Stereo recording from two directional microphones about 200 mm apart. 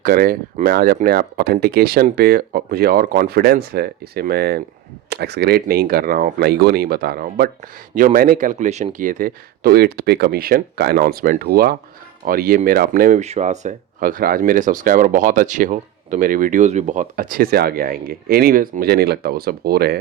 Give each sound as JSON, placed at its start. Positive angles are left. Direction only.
{"t": 0.0, "sound": "speech", "side_deg": -45}